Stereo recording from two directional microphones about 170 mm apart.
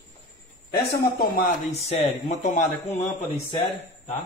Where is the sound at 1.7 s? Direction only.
40° left (ahead or behind).